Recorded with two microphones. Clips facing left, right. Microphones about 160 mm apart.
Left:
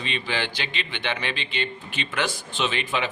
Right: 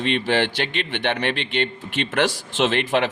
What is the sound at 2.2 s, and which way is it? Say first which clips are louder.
Speech: right 6 dB; 85° right.